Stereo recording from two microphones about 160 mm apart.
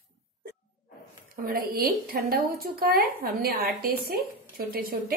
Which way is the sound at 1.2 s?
65° right (ahead or behind).